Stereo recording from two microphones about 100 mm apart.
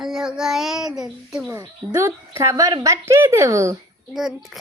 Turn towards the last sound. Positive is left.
turn(degrees=-5)  # may be behind; listen again after turning